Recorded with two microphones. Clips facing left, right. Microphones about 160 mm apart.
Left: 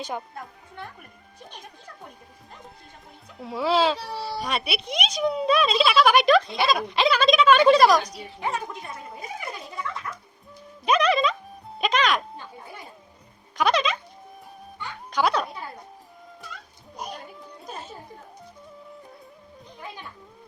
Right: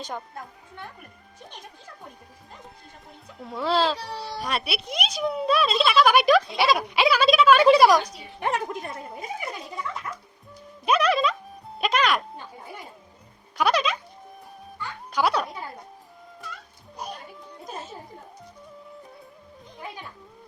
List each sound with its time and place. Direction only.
0.0 s speech: 5° left (ahead or behind)
3.3 s speech: centre (ahead or behind)
8.4 s a woman's voice: 60° right (ahead or behind)
10.8 s speech: 5° right (ahead or behind)
13.6 s music: 5° right (ahead or behind)
15.1 s a child's voice: 5° right (ahead or behind)